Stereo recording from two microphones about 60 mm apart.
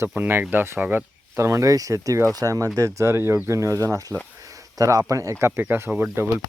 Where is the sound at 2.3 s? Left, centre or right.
Right.